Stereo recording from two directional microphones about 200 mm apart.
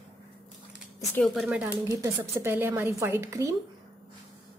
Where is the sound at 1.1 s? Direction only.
Centre (ahead or behind); by 3.5 s 15° right (ahead or behind).